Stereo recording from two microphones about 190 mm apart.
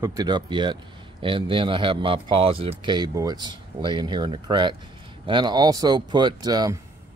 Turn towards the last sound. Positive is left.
turn(degrees=-20)  # may be behind; listen again after turning